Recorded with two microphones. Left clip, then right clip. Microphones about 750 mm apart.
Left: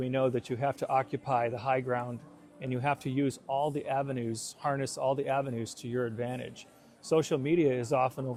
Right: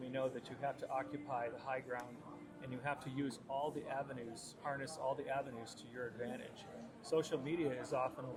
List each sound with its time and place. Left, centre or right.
0.1 s speech: left